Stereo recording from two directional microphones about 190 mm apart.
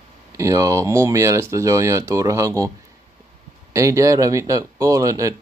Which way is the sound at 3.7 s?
15° right (ahead or behind).